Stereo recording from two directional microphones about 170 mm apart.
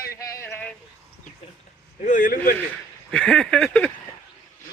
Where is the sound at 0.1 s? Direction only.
20° left (ahead or behind).